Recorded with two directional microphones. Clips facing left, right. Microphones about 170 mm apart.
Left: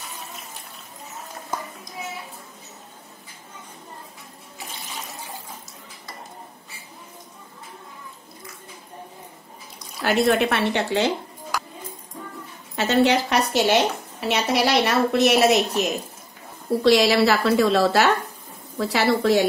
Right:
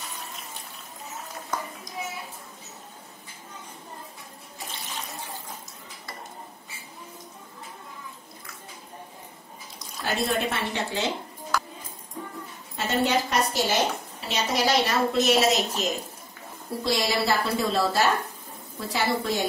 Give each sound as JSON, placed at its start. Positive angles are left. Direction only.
{"t": 10.0, "sound": "a woman's voice", "side_deg": 80}
{"t": 12.7, "sound": "a woman's voice", "side_deg": 75}